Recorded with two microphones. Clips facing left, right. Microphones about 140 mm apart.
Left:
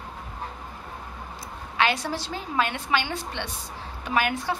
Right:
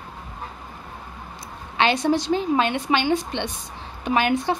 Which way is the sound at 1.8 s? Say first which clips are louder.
Right 5 dB; 25° right (ahead or behind).